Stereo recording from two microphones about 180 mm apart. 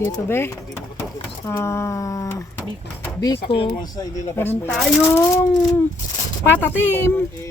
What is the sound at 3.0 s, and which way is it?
Drawer open or close, 20° left (ahead or behind).